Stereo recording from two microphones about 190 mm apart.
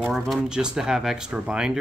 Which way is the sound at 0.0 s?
5° right (ahead or behind).